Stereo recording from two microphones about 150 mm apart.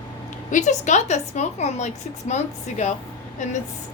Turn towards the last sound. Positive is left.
turn(degrees=55)  # may be behind; listen again after turning